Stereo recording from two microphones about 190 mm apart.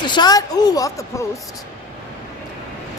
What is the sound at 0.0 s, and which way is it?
Speech, 20° left (ahead or behind).